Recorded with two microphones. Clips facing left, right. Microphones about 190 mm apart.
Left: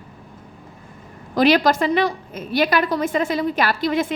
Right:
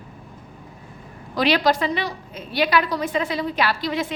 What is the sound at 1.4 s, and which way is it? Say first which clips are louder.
A woman's voice: left 4 dB; 45° left (ahead or behind).